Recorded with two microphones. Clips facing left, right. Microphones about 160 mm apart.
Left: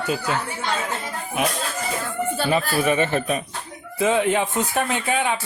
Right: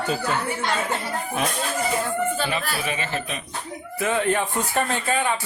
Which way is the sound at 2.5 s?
45° left (ahead or behind).